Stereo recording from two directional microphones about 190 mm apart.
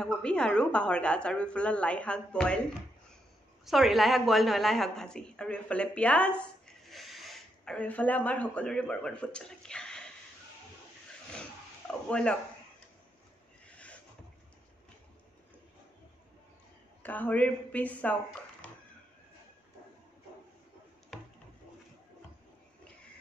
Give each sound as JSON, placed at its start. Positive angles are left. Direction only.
{"t": 0.0, "sound": "a woman's voice", "side_deg": 5}
{"t": 3.6, "sound": "a woman's voice", "side_deg": 0}
{"t": 12.1, "sound": "a woman's voice", "side_deg": 5}
{"t": 13.7, "sound": "a sound", "side_deg": 5}
{"t": 17.0, "sound": "a woman's voice", "side_deg": 10}
{"t": 21.1, "sound": "a sound", "side_deg": 0}